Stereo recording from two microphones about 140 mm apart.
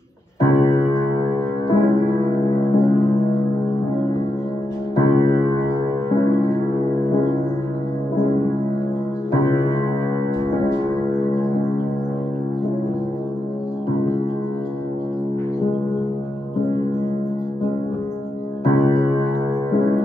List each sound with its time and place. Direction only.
0.4 s music: 20° left (ahead or behind)
4.9 s music: 20° left (ahead or behind)
10.8 s music: 20° left (ahead or behind)
18.6 s keyboard: 20° left (ahead or behind)